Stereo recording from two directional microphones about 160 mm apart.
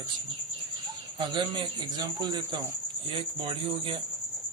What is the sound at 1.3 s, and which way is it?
Speech, 30° right (ahead or behind).